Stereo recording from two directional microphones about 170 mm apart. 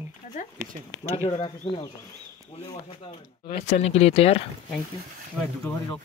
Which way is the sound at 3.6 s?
40° left (ahead or behind).